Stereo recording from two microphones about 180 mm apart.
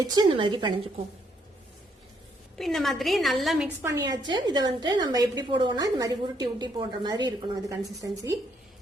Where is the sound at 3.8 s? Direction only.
20° right (ahead or behind).